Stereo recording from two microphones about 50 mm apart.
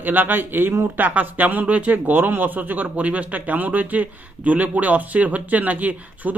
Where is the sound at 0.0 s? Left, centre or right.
Right.